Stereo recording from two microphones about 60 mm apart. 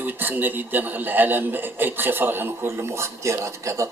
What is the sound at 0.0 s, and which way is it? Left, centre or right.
A man's voice, right.